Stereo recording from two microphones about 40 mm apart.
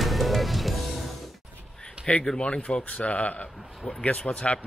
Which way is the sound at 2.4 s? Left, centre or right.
Left.